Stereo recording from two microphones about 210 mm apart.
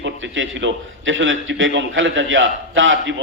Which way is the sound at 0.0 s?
60° right (ahead or behind).